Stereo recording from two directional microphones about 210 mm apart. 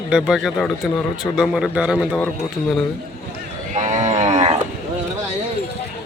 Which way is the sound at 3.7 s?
35° right (ahead or behind).